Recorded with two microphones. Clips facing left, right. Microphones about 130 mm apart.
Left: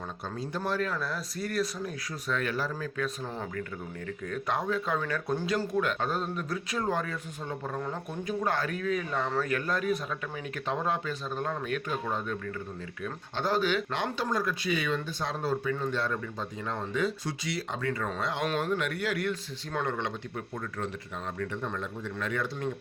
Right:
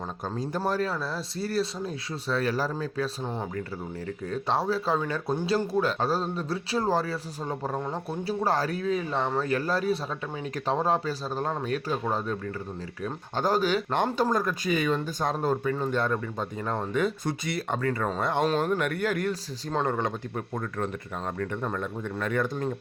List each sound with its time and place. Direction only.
0.3 s speech: 40° right (ahead or behind)
4.3 s speech: 30° right (ahead or behind); by 18.4 s 55° right (ahead or behind)
18.4 s speech: 40° right (ahead or behind)